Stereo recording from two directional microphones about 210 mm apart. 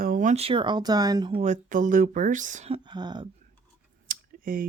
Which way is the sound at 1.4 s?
35° right (ahead or behind).